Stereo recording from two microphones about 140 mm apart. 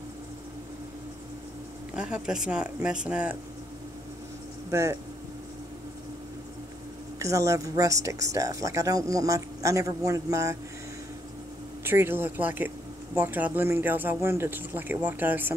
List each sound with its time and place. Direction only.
2.0 s speech: 5° right (ahead or behind)
4.6 s speech: 20° right (ahead or behind)
7.2 s speech: 20° right (ahead or behind)
11.8 s speech: 15° right (ahead or behind)